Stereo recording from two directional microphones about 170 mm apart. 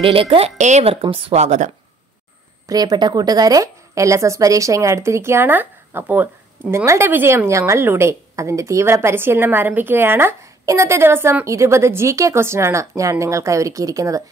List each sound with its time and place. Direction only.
0.0 s speech: 30° right (ahead or behind)
1.0 s speech: 30° right (ahead or behind)
2.7 s a woman's voice: 25° right (ahead or behind)